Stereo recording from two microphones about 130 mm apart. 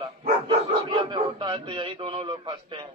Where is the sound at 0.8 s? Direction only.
35° right (ahead or behind).